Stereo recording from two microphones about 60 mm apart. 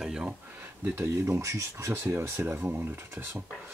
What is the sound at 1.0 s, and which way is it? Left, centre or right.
Speech, right.